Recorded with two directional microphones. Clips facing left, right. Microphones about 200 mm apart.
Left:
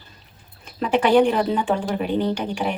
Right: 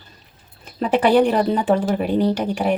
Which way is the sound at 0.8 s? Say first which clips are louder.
Right 1 dB; 35° right (ahead or behind).